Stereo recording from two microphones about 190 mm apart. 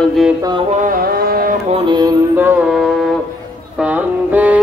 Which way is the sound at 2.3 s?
10° right (ahead or behind).